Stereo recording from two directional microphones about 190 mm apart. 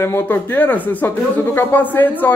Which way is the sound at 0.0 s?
10° left (ahead or behind).